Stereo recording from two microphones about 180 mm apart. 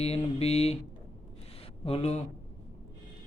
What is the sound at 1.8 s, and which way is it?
Mantra, 35° left (ahead or behind).